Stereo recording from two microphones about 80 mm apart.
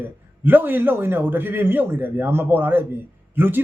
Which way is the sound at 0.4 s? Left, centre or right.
Right.